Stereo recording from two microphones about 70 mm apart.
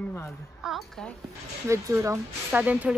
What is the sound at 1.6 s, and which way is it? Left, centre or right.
Speech, right.